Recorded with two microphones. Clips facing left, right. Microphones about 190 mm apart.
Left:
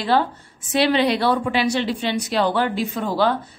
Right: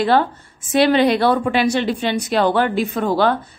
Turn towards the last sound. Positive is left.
turn(degrees=-55)  # may be behind; listen again after turning